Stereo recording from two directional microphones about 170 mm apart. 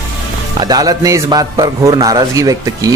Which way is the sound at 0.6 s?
25° right (ahead or behind).